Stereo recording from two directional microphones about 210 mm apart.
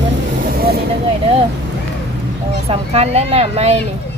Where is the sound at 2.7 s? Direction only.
30° right (ahead or behind).